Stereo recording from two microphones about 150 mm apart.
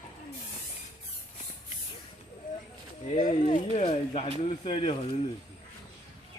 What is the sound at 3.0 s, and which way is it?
Speech, 55° left (ahead or behind).